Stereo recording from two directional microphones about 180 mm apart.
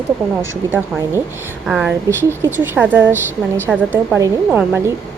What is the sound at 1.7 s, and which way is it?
A woman's voice, 5° right (ahead or behind).